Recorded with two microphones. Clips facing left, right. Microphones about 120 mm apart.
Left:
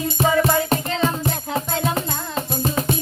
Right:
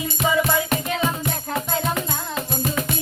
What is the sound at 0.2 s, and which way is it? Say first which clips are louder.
Music: left 3 dB; 35° left (ahead or behind).